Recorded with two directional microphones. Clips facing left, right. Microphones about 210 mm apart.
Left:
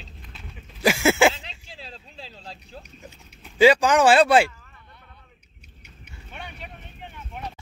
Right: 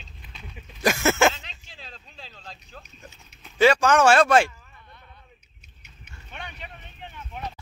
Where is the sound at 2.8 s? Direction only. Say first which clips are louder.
Left 3 dB; 10° left (ahead or behind).